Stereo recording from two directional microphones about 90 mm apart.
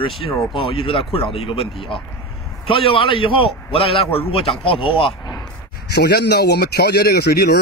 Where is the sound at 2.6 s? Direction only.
90° left.